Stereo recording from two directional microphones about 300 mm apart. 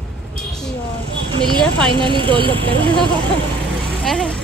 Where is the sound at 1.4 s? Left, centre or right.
Centre.